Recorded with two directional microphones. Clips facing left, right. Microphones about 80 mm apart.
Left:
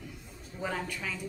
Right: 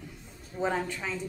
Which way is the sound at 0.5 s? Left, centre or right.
Right.